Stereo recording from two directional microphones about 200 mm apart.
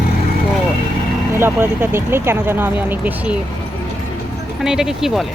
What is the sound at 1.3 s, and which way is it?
Speech, 10° right (ahead or behind).